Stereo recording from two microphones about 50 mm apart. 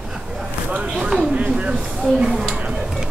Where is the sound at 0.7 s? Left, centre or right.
Centre.